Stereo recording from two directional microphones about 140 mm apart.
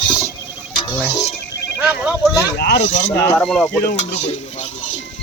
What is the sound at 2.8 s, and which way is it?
Speech, 55° left (ahead or behind).